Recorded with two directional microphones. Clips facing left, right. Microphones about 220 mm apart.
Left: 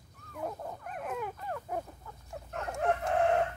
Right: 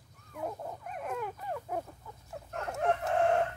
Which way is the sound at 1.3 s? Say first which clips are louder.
Even; 10° right (ahead or behind).